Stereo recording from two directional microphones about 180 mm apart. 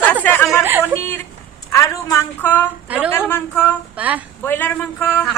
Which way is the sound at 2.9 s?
5° right (ahead or behind).